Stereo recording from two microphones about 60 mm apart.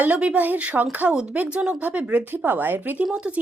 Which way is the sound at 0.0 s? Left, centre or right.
Right.